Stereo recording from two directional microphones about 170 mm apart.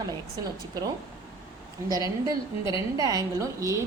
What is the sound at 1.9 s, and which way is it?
A woman's voice, 20° right (ahead or behind).